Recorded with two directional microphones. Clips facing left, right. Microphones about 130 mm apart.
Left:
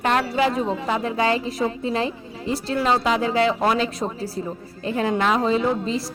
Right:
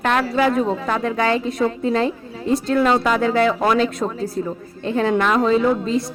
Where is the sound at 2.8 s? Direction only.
55° right (ahead or behind).